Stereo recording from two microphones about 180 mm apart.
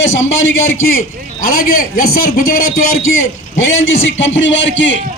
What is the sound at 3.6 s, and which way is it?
A man's voice, 90° left.